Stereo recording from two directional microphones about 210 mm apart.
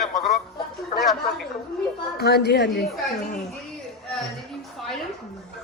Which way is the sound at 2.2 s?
50° left (ahead or behind).